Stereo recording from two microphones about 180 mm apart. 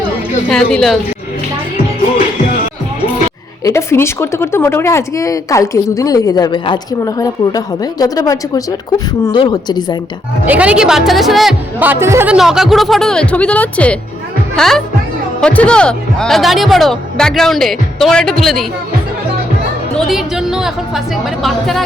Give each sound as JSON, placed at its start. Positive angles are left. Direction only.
{"t": 0.4, "sound": "speech", "side_deg": 5}
{"t": 3.6, "sound": "a woman's voice", "side_deg": 15}
{"t": 10.4, "sound": "speech", "side_deg": -10}
{"t": 20.0, "sound": "speech", "side_deg": 0}